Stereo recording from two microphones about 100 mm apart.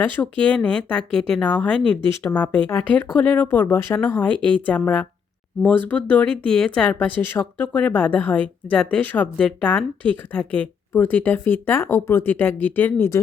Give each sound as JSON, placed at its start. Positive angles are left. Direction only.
{"t": 0.0, "sound": "a woman's voice", "side_deg": 15}